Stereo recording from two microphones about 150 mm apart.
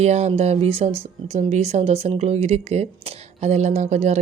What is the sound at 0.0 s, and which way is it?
Speech, 45° right (ahead or behind).